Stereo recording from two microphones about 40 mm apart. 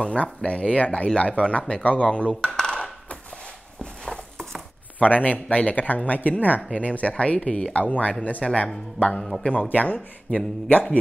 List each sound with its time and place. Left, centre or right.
0.0 s speech: left
1.8 s speech: left
2.0 s dishes: left
4.0 s a sound: centre
4.9 s a man's voice: left
5.5 s speech: left
5.8 s speech: left